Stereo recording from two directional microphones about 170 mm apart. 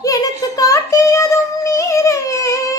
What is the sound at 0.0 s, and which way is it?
Child singing, 20° left (ahead or behind).